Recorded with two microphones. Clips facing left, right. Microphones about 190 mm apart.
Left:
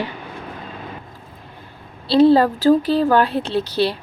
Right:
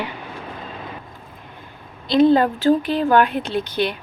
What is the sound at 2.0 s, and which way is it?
Speech, 35° left (ahead or behind).